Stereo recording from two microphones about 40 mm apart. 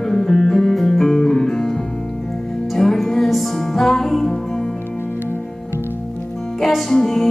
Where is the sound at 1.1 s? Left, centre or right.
Left.